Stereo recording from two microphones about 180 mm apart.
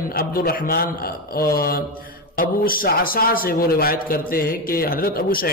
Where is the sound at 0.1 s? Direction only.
55° left (ahead or behind).